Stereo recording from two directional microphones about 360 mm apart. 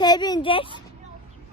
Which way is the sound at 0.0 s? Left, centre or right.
Centre.